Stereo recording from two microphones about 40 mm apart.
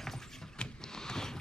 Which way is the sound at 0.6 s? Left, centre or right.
Centre.